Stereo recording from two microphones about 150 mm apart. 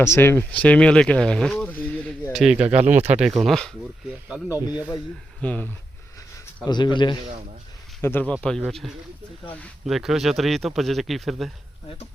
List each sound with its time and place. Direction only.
0.0 s speech: 15° left (ahead or behind)
2.3 s speech: 5° right (ahead or behind)
2.7 s speech: 50° right (ahead or behind)
3.2 s speech: centre (ahead or behind)
4.4 s speech: 20° left (ahead or behind)
5.4 s speech: 10° left (ahead or behind)
6.7 s a man's voice: 30° left (ahead or behind)
8.0 s speech: 10° left (ahead or behind)